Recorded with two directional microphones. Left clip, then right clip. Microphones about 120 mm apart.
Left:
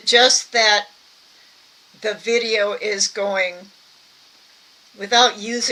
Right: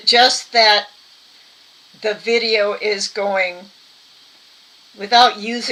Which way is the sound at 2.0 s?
25° left (ahead or behind).